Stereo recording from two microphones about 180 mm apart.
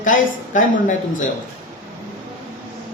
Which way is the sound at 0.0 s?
45° left (ahead or behind).